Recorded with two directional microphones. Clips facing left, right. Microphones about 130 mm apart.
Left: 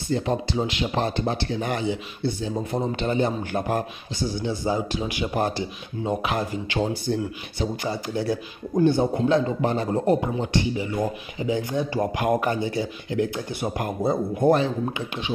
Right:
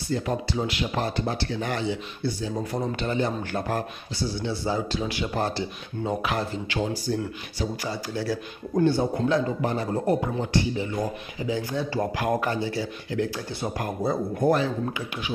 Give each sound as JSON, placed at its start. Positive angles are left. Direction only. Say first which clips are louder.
{"t": 0.1, "sound": "a man's voice", "louder": "left 3 dB", "side_deg": 25}
{"t": 7.1, "sound": "speech", "louder": "left 1 dB", "side_deg": 35}
{"t": 7.5, "sound": "speech", "louder": "left 3 dB", "side_deg": 20}